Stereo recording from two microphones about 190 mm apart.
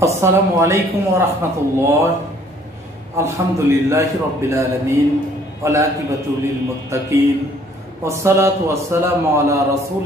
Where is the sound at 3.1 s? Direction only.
15° right (ahead or behind).